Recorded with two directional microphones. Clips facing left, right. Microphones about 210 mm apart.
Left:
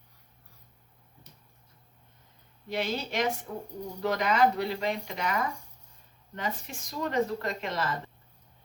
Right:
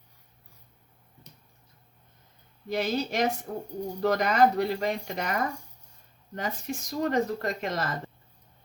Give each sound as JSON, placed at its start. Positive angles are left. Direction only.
{"t": 2.6, "sound": "a woman's voice", "side_deg": -40}